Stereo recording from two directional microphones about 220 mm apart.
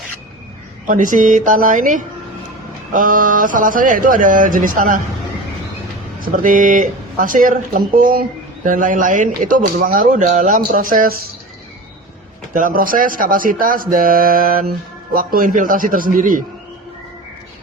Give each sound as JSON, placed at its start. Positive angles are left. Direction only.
{"t": 0.9, "sound": "speech", "side_deg": -35}
{"t": 6.3, "sound": "speech", "side_deg": -35}
{"t": 12.5, "sound": "speech", "side_deg": -40}